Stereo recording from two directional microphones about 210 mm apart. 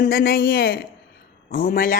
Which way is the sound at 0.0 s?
45° left (ahead or behind).